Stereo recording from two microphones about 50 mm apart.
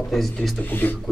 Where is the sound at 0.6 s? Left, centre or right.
Left.